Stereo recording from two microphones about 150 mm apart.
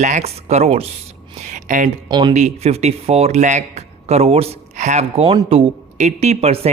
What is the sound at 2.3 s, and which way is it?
Speech, 45° right (ahead or behind).